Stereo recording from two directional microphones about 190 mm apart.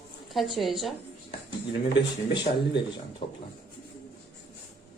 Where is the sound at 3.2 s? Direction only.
45° left (ahead or behind).